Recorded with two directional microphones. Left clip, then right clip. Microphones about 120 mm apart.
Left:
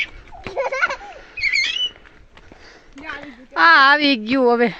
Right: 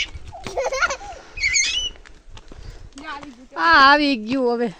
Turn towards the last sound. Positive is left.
turn(degrees=0)  # may be behind; listen again after turning